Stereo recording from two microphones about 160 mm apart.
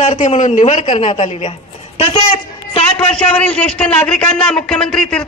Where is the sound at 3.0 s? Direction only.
10° left (ahead or behind).